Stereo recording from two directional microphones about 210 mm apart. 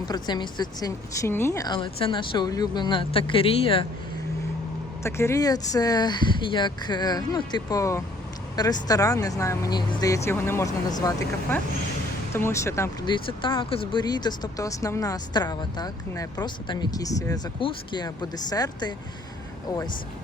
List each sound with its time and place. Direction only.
0.0 s speech: 20° left (ahead or behind)
5.0 s speech: 10° left (ahead or behind)